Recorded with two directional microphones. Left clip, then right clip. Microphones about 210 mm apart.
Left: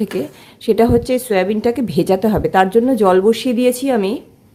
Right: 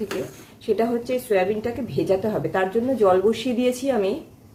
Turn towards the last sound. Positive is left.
turn(degrees=40)  # may be behind; listen again after turning